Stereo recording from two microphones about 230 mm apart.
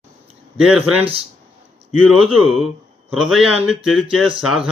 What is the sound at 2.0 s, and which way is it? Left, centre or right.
Speech, centre.